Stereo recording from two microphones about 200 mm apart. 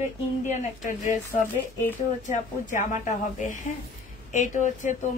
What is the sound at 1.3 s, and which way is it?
A woman's voice, 35° left (ahead or behind).